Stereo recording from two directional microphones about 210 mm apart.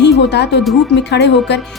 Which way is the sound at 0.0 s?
55° left (ahead or behind).